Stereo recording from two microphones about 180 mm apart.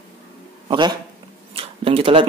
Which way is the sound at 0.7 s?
25° right (ahead or behind).